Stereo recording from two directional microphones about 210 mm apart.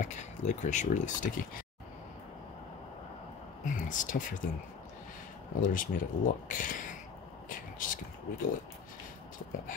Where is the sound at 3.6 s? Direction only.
40° left (ahead or behind).